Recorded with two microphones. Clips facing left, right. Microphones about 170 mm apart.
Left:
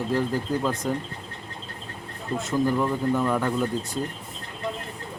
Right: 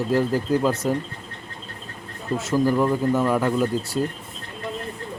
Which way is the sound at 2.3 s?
Centre (ahead or behind).